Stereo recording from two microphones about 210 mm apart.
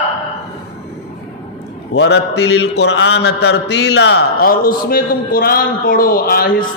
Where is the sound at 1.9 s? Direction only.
55° left (ahead or behind).